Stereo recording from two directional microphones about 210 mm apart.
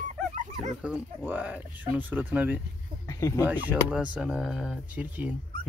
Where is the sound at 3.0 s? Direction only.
15° left (ahead or behind).